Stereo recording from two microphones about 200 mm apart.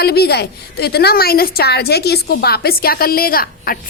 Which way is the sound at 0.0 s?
50° left (ahead or behind).